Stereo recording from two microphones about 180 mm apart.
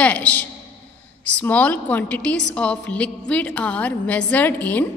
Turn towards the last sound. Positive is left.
turn(degrees=10)  # may be behind; listen again after turning